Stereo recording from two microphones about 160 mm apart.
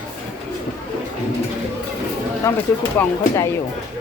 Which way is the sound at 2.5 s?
15° left (ahead or behind).